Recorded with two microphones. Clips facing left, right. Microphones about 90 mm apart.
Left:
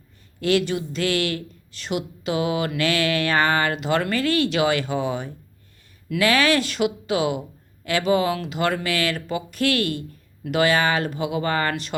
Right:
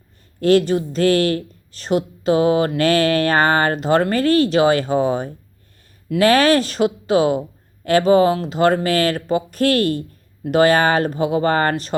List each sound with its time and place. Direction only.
0.3 s a woman's voice: 40° right (ahead or behind)